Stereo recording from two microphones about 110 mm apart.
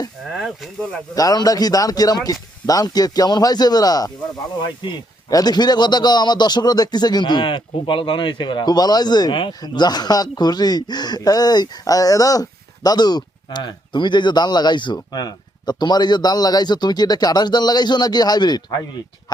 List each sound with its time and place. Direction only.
0.3 s speech: centre (ahead or behind)
1.1 s a man's voice: 35° left (ahead or behind)